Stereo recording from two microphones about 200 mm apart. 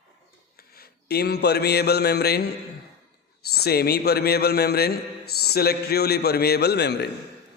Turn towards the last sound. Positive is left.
turn(degrees=55)  # may be behind; listen again after turning